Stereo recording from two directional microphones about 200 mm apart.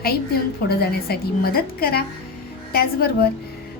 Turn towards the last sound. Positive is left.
turn(degrees=50)  # may be behind; listen again after turning